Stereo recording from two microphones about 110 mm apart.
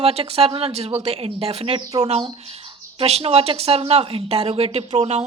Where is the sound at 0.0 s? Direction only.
65° right (ahead or behind).